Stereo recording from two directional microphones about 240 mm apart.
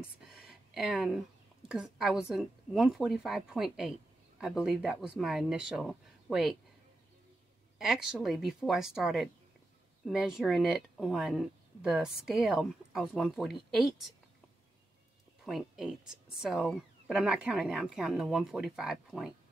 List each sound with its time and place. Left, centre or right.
0.3 s a sound: centre
1.7 s speech: centre
7.8 s speech: centre
15.4 s speech: centre